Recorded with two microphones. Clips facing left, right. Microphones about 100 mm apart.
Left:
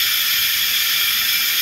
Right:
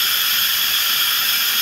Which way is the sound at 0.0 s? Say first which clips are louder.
Right 2 dB; 45° right (ahead or behind).